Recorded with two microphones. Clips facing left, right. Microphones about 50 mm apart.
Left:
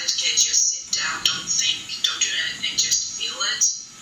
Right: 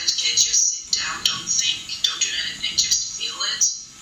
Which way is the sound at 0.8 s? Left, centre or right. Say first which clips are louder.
Left 2 dB; centre.